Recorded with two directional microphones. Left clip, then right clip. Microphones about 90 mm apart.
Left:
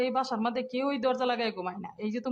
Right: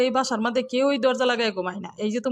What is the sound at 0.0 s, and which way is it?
Speech, 50° right (ahead or behind).